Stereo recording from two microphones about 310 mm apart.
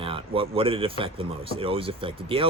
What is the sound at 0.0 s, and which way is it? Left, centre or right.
Speech, centre.